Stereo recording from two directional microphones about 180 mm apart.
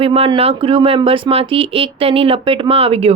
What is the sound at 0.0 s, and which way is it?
Speech, 30° right (ahead or behind).